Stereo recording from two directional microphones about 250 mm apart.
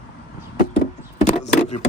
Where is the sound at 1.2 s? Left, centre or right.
Left.